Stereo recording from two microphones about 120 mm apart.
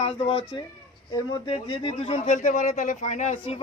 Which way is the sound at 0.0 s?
50° left (ahead or behind).